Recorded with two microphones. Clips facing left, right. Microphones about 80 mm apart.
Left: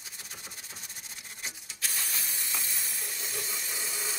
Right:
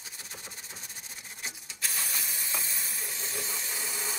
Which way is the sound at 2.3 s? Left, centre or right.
Centre.